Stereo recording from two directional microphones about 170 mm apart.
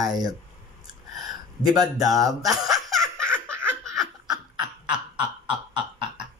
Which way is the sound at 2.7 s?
Centre (ahead or behind).